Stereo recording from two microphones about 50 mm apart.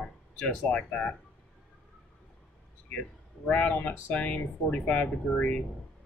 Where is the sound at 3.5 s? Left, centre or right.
Left.